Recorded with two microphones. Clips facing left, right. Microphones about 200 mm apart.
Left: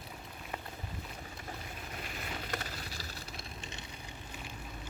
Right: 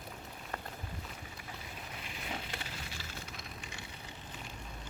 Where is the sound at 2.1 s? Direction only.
45° left (ahead or behind).